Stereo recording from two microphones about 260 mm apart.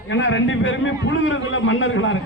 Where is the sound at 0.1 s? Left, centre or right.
Left.